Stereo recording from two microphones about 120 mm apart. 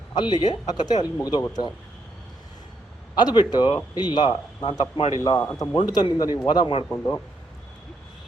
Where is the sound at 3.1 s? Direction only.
35° left (ahead or behind).